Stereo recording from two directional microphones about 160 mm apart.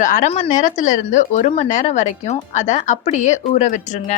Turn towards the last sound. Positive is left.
turn(degrees=45)  # may be behind; listen again after turning